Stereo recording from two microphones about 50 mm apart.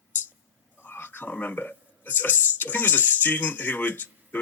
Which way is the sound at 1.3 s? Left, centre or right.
Left.